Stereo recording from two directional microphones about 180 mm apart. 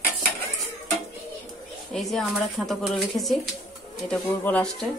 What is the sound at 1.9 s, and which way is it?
Speech, centre (ahead or behind).